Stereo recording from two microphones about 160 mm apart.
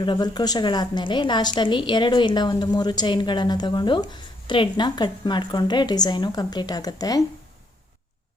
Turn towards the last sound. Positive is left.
turn(degrees=25)  # may be behind; listen again after turning